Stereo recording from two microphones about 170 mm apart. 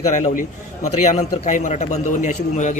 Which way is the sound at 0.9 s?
40° left (ahead or behind).